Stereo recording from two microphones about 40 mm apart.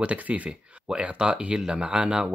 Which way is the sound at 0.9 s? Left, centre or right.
Right.